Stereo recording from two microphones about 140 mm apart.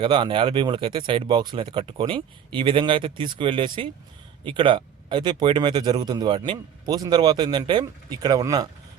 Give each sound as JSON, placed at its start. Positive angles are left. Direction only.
{"t": 0.0, "sound": "speech", "side_deg": -35}